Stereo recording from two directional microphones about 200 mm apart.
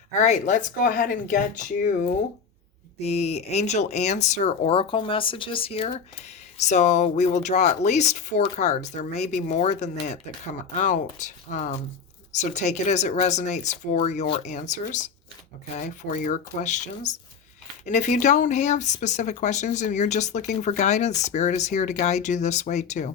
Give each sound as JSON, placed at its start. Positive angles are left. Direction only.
{"t": 0.1, "sound": "speech", "side_deg": 35}